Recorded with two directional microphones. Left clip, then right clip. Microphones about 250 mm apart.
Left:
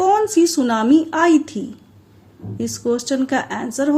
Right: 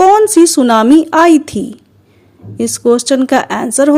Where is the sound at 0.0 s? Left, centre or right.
Right.